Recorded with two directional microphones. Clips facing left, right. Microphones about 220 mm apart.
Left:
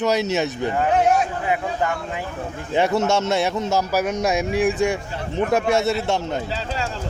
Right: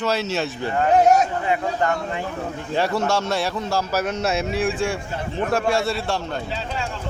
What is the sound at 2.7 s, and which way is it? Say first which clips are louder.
A man's voice: left 3 dB; 20° left (ahead or behind).